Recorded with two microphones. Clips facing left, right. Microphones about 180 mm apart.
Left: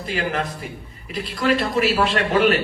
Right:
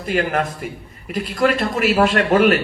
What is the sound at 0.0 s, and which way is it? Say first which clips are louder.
Speech: right 4 dB; 50° right (ahead or behind).